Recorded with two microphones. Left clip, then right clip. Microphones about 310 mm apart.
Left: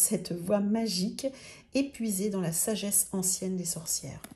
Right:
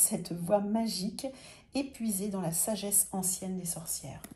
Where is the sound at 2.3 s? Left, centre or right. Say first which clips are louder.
Left 2 dB; left.